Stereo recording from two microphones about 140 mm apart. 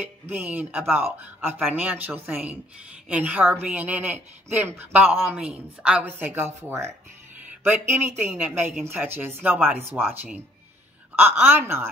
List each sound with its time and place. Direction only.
0.3 s speech: 10° right (ahead or behind)
11.1 s speech: 15° right (ahead or behind)